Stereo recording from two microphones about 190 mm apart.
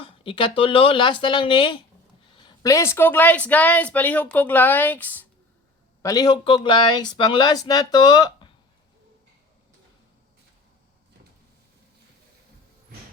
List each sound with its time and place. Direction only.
0.0 s a woman's voice: 25° left (ahead or behind)